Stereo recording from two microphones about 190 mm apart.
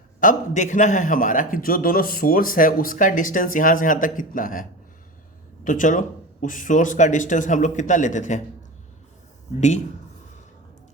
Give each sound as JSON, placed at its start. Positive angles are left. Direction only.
{"t": 0.2, "sound": "a man's voice", "side_deg": 40}
{"t": 5.6, "sound": "speech", "side_deg": 45}
{"t": 9.6, "sound": "speech", "side_deg": 40}